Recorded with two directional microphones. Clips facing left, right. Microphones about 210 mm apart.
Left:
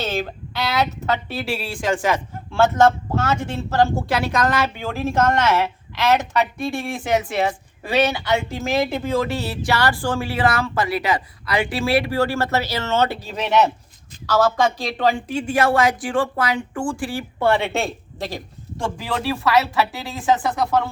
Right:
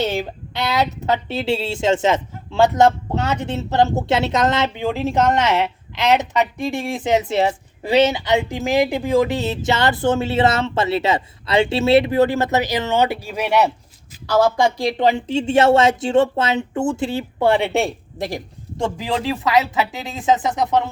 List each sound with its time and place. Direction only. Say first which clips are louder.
0.0 s speech: right 3 dB; 15° right (ahead or behind)